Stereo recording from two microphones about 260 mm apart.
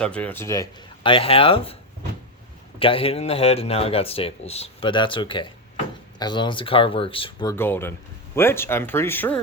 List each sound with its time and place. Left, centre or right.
0.0 s a man's voice: centre
7.5 s speech: centre